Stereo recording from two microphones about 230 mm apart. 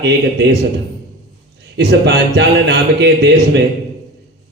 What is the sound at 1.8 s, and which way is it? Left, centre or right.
Speech, right.